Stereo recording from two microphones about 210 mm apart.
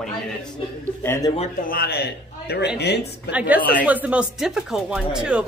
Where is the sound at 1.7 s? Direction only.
50° left (ahead or behind).